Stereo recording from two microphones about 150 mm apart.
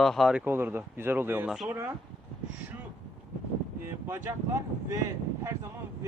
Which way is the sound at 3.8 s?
15° right (ahead or behind).